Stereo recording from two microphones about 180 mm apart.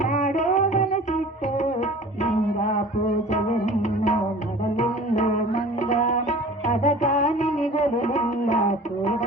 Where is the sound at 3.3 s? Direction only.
40° left (ahead or behind).